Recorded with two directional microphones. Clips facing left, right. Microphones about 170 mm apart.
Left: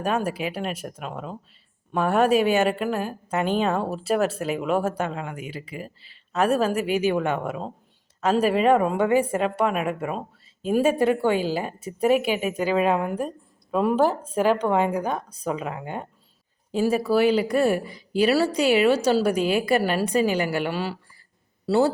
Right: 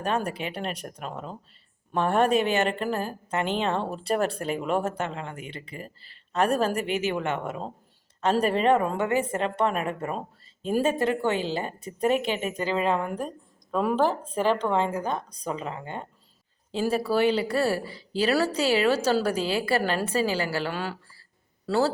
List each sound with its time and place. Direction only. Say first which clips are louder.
0.3 s a woman's voice: left 4 dB; 5° left (ahead or behind)